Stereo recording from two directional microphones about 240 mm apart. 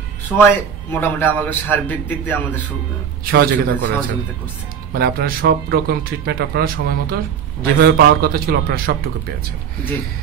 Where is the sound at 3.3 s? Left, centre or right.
Right.